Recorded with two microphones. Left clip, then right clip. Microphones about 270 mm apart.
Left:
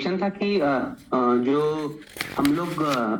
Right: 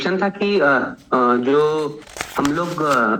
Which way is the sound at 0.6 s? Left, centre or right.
Right.